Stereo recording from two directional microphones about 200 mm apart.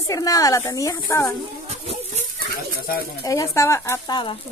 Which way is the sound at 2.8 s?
50° left (ahead or behind).